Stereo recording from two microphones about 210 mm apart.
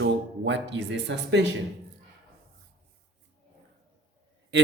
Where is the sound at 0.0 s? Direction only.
60° right (ahead or behind).